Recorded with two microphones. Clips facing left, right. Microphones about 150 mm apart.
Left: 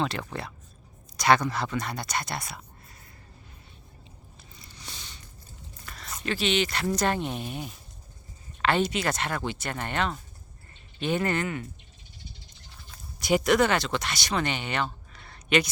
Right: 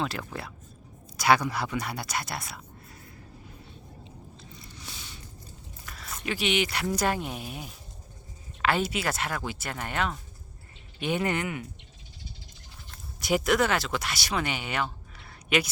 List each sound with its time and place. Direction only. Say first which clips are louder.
0.0 s speech: left 2 dB; 5° right (ahead or behind)
4.4 s a sound: right 4 dB; centre (ahead or behind)
5.8 s biting: left 1 dB; centre (ahead or behind)
6.3 s speech: left 1 dB; 15° right (ahead or behind)
13.1 s speech: left 2 dB; centre (ahead or behind)